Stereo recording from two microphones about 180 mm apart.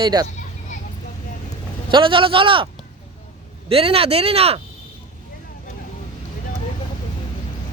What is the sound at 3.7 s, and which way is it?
Speech, 30° right (ahead or behind).